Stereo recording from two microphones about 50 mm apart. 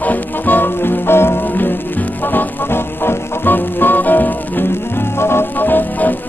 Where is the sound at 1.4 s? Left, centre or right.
Left.